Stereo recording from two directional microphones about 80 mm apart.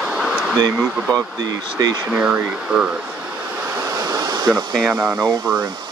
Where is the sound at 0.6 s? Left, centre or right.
Right.